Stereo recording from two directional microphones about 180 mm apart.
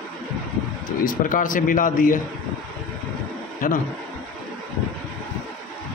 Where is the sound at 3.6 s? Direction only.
50° left (ahead or behind).